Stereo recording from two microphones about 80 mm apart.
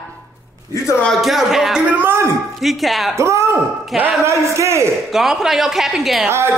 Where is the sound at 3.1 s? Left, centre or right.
Right.